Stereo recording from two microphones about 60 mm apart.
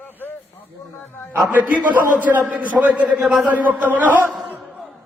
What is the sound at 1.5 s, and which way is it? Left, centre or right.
A man's voice, right.